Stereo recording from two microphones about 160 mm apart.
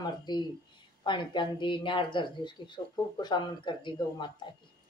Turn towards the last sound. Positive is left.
turn(degrees=30)  # may be behind; listen again after turning